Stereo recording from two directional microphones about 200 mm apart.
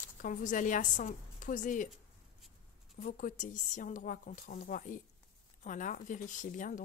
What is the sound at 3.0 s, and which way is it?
Speech, 40° left (ahead or behind).